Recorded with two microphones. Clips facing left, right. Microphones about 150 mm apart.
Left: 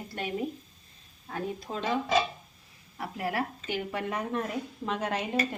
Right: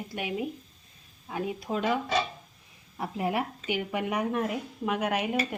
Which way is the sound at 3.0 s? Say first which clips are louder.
Right 2 dB; 20° right (ahead or behind).